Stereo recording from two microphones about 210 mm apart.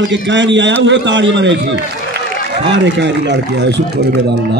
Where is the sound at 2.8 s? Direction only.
55° right (ahead or behind).